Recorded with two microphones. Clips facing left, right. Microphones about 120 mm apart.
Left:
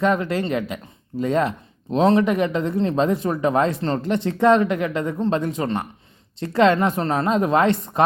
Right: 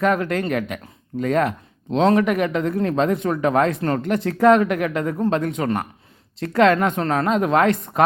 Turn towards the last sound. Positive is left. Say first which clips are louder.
# right 1 dB
turn(degrees=0)  # may be behind; listen again after turning